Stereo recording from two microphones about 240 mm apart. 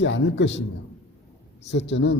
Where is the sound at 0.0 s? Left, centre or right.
Left.